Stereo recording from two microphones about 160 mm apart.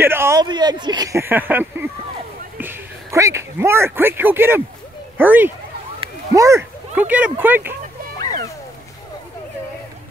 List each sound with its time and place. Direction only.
0.0 s a child's voice: 15° right (ahead or behind)
6.9 s speech: 10° right (ahead or behind)